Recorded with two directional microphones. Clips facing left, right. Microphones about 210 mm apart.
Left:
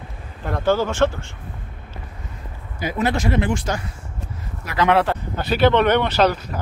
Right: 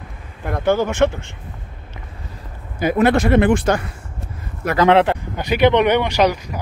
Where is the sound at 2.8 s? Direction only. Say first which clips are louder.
Right 7 dB; 60° right (ahead or behind).